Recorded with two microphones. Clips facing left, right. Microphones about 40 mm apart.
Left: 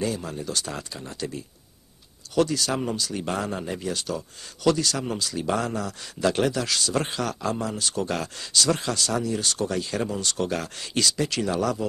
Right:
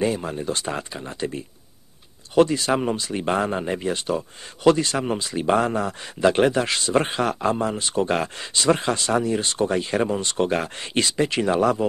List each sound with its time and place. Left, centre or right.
0.0 s speech: right